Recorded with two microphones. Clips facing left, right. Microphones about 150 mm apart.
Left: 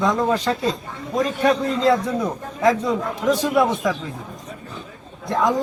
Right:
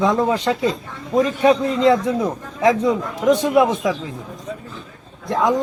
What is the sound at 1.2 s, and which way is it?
Speech, 20° right (ahead or behind).